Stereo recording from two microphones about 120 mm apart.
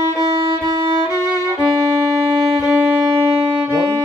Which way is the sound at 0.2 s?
50° right (ahead or behind).